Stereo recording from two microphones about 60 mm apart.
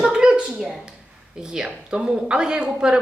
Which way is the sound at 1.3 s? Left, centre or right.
Centre.